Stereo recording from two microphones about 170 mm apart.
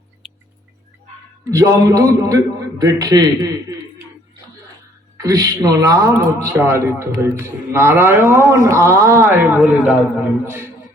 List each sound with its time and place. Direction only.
1.5 s a man's voice: 20° right (ahead or behind)
5.1 s a woman's voice: 20° right (ahead or behind)